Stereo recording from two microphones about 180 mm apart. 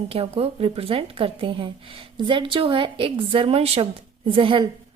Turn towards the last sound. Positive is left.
turn(degrees=-30)  # may be behind; listen again after turning